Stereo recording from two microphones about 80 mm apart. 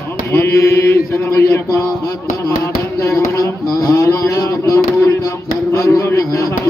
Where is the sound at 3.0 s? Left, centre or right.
Left.